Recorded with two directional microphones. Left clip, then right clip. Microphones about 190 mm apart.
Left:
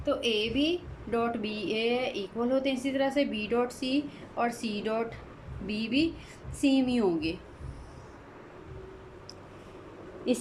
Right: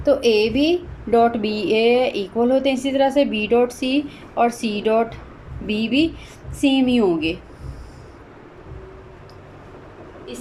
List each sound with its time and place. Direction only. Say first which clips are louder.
0.0 s a woman's voice: right 12 dB; 25° right (ahead or behind)